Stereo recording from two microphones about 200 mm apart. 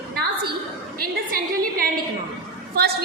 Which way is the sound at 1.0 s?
45° right (ahead or behind).